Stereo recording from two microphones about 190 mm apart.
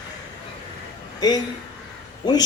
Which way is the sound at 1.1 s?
20° left (ahead or behind).